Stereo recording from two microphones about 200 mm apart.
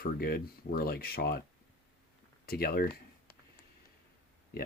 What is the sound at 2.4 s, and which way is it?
Speech, 50° left (ahead or behind).